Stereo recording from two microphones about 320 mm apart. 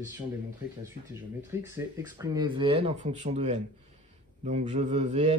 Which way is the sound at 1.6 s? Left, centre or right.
Centre.